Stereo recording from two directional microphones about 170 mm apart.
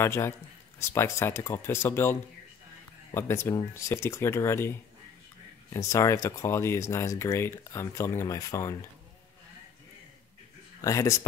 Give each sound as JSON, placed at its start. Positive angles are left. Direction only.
{"t": 0.0, "sound": "speech", "side_deg": 15}
{"t": 10.8, "sound": "speech", "side_deg": 20}